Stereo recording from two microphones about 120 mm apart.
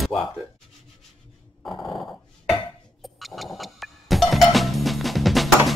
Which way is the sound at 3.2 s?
Centre (ahead or behind).